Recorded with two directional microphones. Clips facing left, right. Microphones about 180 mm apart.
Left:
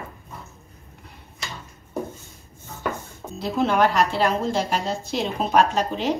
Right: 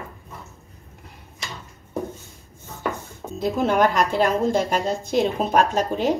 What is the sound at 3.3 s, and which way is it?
Speech, 50° right (ahead or behind).